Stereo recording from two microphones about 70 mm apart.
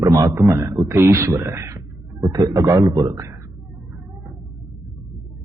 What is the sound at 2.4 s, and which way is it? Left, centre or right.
Speech, right.